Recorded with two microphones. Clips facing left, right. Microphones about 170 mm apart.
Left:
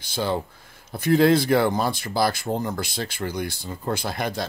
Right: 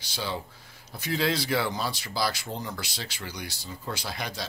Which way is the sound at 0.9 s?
50° left (ahead or behind).